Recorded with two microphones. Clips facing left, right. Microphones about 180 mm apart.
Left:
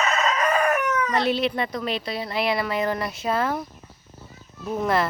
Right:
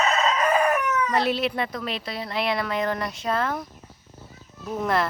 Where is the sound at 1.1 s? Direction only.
Centre (ahead or behind).